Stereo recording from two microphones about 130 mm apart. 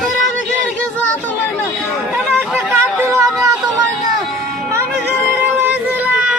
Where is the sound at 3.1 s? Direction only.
25° right (ahead or behind).